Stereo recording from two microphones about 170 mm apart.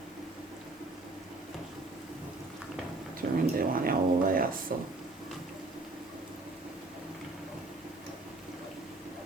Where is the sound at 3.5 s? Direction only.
60° right (ahead or behind).